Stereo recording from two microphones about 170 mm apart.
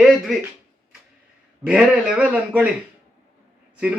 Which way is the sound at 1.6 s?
5° right (ahead or behind).